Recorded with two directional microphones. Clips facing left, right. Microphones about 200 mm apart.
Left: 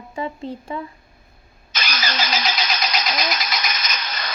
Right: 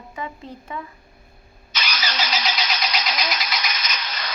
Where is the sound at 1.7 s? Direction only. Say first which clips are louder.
Left 2 dB; 45° left (ahead or behind).